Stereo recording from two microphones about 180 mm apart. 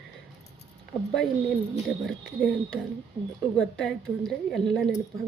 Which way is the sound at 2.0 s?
Centre (ahead or behind).